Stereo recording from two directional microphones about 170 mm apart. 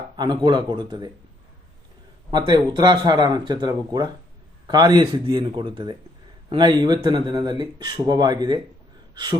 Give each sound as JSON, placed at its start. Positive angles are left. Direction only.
{"t": 0.2, "sound": "speech", "side_deg": -25}
{"t": 2.3, "sound": "speech", "side_deg": -25}
{"t": 9.1, "sound": "gasp", "side_deg": -25}